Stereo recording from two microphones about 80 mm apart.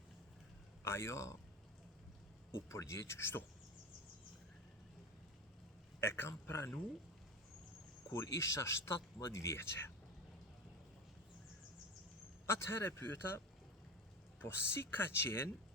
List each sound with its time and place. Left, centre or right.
0.9 s speech: left
2.5 s speech: left
6.0 s speech: left
8.1 s speech: left
12.5 s speech: left
14.3 s speech: left